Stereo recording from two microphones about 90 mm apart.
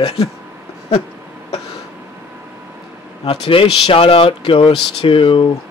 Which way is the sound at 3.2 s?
90° left.